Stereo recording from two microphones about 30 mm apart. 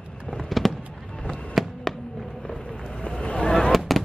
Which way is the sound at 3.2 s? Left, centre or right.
Left.